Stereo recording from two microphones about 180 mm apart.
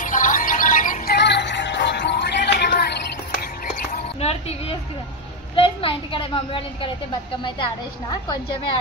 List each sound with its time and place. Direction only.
0.0 s music: 45° left (ahead or behind)
1.1 s music: 70° left (ahead or behind)
4.2 s a sound: 35° left (ahead or behind)